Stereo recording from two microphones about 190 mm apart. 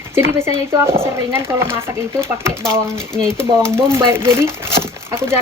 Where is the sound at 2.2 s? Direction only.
15° right (ahead or behind).